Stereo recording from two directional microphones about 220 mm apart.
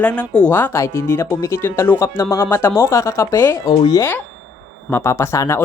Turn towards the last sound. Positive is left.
turn(degrees=10)  # may be behind; listen again after turning